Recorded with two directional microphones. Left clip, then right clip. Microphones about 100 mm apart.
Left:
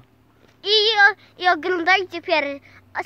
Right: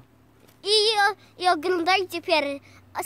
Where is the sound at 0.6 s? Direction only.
50° right (ahead or behind).